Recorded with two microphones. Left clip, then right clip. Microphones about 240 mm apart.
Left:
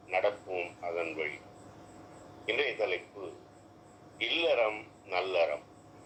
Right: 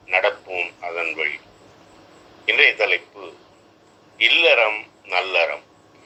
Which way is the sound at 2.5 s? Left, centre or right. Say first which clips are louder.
Right 15 dB; right.